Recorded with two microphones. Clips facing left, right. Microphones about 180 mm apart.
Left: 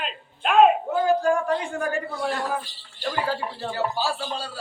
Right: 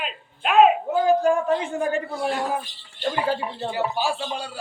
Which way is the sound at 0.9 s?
20° right (ahead or behind).